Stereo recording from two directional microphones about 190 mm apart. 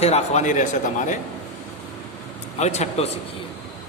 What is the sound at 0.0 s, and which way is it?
Speech, 35° left (ahead or behind).